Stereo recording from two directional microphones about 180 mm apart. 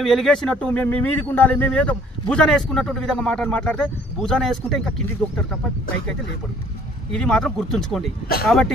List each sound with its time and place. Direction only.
0.0 s speech: centre (ahead or behind)
7.1 s speech: 5° left (ahead or behind)